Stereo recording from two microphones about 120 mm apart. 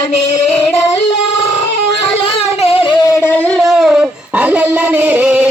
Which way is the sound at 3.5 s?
Centre (ahead or behind).